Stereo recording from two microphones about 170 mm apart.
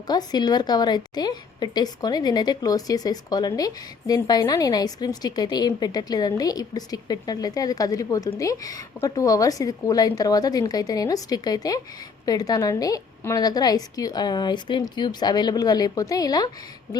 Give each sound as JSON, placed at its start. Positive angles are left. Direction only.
{"t": 0.1, "sound": "a woman's voice", "side_deg": 25}